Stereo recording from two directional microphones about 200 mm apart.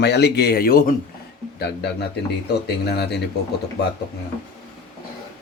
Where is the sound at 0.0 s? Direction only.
55° left (ahead or behind).